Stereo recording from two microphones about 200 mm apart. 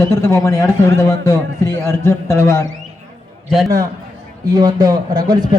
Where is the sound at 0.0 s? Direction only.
15° left (ahead or behind).